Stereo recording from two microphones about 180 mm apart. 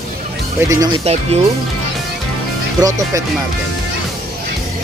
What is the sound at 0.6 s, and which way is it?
Speech, 15° right (ahead or behind).